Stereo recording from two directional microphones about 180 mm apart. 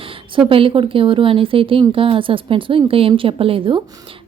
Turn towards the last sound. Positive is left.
turn(degrees=-30)  # may be behind; listen again after turning